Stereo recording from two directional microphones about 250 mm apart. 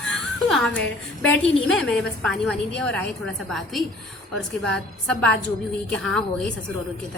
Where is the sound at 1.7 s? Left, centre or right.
Centre.